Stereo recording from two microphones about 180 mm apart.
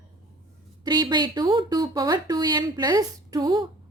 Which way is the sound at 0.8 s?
25° right (ahead or behind).